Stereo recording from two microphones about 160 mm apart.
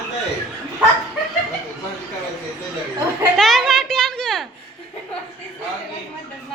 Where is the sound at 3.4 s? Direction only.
Centre (ahead or behind).